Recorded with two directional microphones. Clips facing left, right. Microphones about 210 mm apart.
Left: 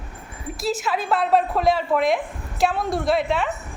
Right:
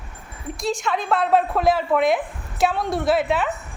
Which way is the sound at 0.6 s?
5° left (ahead or behind).